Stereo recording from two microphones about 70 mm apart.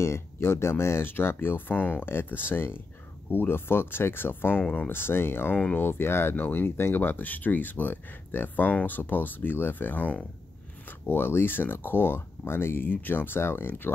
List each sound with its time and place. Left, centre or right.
0.0 s speech: left